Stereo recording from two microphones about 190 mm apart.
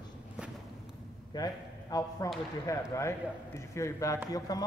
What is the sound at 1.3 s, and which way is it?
A man's voice, 20° left (ahead or behind).